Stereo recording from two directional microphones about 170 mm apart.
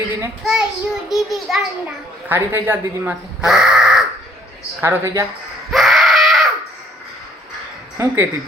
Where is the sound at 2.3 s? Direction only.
10° right (ahead or behind).